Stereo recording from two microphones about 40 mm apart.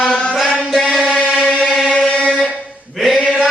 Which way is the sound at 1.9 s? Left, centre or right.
Left.